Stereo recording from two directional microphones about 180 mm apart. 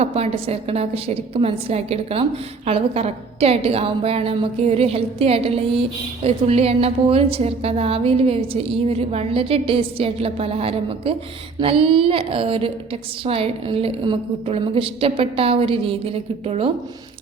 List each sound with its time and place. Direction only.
0.0 s a woman's voice: 35° right (ahead or behind)